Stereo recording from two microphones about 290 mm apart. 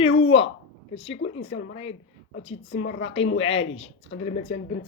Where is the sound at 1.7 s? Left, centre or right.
Centre.